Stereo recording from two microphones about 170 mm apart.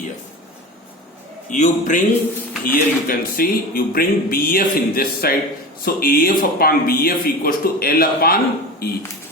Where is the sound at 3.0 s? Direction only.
60° left (ahead or behind).